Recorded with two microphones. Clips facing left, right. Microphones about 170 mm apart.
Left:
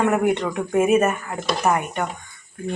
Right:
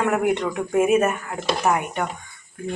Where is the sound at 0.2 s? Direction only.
5° right (ahead or behind).